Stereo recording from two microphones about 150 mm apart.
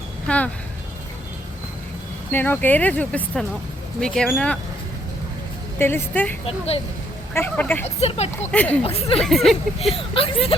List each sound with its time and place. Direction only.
0.3 s speech: 10° left (ahead or behind)
2.3 s speech: 10° left (ahead or behind)
5.8 s speech: 15° left (ahead or behind)
6.4 s speech: 40° left (ahead or behind)
7.3 s speech: 10° left (ahead or behind)
7.9 s speech: 45° left (ahead or behind)
8.5 s speech: 10° left (ahead or behind)
8.8 s speech: 40° left (ahead or behind)
9.2 s speech: centre (ahead or behind)
9.9 s speech: 40° left (ahead or behind)